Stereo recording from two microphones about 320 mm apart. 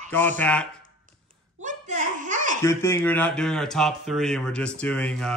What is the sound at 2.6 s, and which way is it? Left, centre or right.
A man's voice, centre.